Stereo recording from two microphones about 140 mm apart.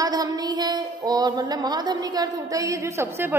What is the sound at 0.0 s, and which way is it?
A woman's voice, 25° right (ahead or behind).